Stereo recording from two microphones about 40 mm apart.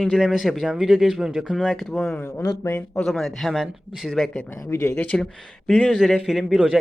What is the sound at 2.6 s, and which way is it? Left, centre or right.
Speech, left.